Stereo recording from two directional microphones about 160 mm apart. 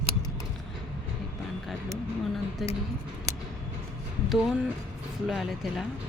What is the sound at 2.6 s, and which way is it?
Speech, centre (ahead or behind).